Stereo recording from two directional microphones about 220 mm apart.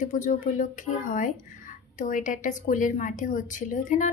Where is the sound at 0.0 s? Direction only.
35° left (ahead or behind).